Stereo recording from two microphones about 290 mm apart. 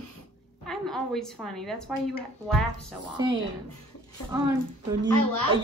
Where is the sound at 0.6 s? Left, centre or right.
Centre.